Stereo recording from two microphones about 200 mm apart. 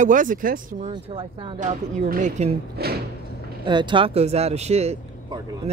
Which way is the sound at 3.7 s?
25° right (ahead or behind).